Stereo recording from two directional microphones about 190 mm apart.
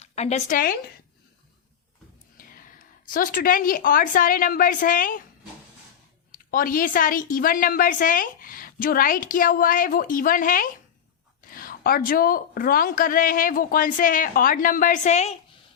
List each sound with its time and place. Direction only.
0.0 s a woman's voice: 35° left (ahead or behind)
2.4 s a woman's voice: 45° left (ahead or behind)
6.3 s a woman's voice: 45° left (ahead or behind)